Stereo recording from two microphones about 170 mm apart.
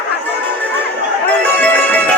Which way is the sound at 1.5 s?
10° left (ahead or behind).